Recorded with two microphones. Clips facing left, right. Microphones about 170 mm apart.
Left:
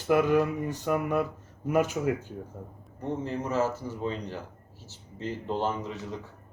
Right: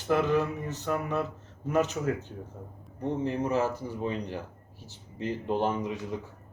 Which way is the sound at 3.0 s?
15° right (ahead or behind).